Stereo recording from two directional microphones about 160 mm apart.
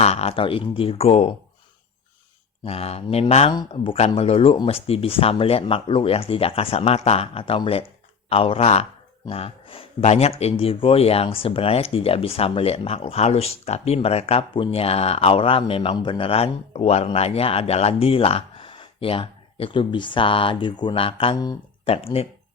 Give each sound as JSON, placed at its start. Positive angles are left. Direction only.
{"t": 0.0, "sound": "speech", "side_deg": 40}
{"t": 2.6, "sound": "speech", "side_deg": 40}